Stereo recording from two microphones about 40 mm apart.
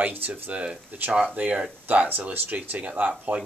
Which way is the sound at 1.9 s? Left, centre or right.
Right.